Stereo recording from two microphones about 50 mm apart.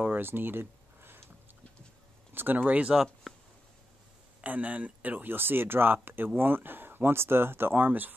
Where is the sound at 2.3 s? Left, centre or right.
Right.